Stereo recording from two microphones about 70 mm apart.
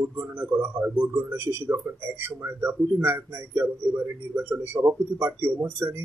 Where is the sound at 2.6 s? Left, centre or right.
Right.